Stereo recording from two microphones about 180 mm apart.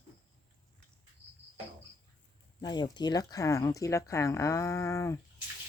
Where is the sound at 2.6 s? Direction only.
25° left (ahead or behind).